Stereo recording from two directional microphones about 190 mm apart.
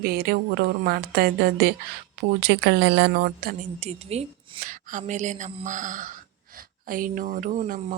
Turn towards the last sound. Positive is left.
turn(degrees=-35)  # may be behind; listen again after turning